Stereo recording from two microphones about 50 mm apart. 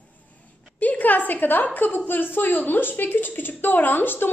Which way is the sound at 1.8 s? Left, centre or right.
Left.